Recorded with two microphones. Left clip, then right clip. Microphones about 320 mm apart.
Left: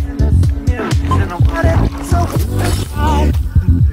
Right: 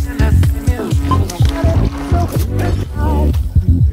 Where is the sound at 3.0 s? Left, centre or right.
Left.